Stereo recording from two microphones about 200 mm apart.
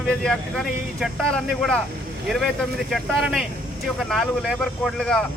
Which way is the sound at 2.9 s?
Centre (ahead or behind).